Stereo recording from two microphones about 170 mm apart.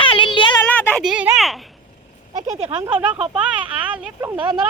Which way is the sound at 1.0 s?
5° right (ahead or behind).